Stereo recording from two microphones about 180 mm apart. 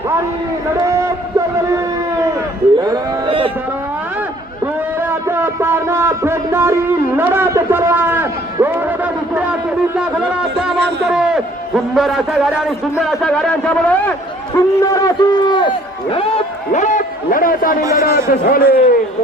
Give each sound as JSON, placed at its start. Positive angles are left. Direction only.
{"t": 0.9, "sound": "a sound", "side_deg": -15}
{"t": 5.3, "sound": "music", "side_deg": -10}
{"t": 11.1, "sound": "a sound", "side_deg": -5}
{"t": 11.9, "sound": "a man's voice", "side_deg": 0}
{"t": 14.8, "sound": "run", "side_deg": 20}
{"t": 17.9, "sound": "a man's voice", "side_deg": 55}